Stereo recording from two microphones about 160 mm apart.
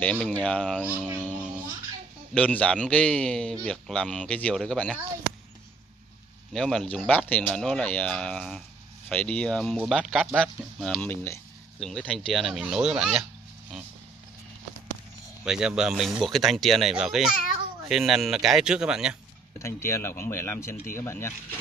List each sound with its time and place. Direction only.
0.0 s speech: 10° left (ahead or behind)
0.9 s speech: 10° right (ahead or behind)
2.3 s speech: 5° left (ahead or behind)
6.5 s speech: 5° left (ahead or behind)
15.4 s speech: 5° right (ahead or behind)
19.6 s speech: 15° left (ahead or behind)